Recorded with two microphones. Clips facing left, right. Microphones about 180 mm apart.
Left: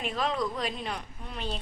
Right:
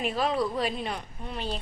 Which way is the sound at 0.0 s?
5° right (ahead or behind).